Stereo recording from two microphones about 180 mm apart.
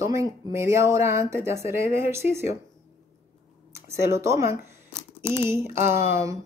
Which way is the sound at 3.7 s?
15° right (ahead or behind).